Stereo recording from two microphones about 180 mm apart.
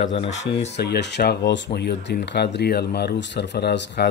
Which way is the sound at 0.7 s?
70° left (ahead or behind).